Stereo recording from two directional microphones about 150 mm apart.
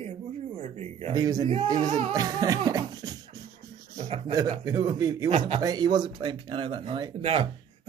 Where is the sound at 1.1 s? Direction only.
25° right (ahead or behind).